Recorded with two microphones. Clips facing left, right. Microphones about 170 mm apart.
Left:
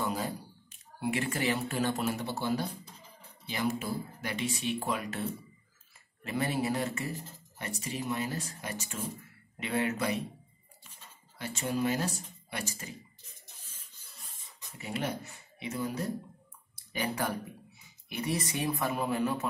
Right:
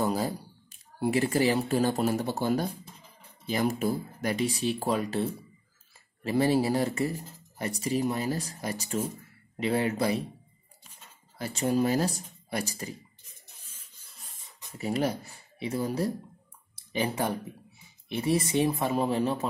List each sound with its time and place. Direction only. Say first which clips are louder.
0.0 s speech: right 5 dB; 35° right (ahead or behind)
11.3 s speech: right 6 dB; 35° right (ahead or behind)
14.1 s rub: right 1 dB; centre (ahead or behind)
14.8 s speech: right 6 dB; 35° right (ahead or behind)